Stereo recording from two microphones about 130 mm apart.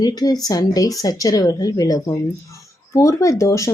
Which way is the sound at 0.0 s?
30° left (ahead or behind).